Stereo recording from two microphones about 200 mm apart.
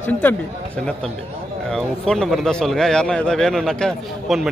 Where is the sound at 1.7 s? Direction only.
Centre (ahead or behind).